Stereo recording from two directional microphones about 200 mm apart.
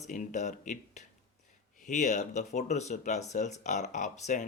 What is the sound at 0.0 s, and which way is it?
Speech, 40° left (ahead or behind).